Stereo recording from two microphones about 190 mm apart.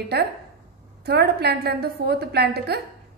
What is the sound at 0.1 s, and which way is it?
A woman's voice, 55° right (ahead or behind).